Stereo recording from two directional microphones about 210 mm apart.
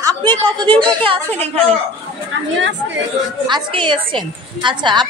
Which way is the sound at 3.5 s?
20° right (ahead or behind).